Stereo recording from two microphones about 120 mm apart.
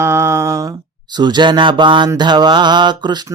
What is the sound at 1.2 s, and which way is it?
Mantra, 40° right (ahead or behind).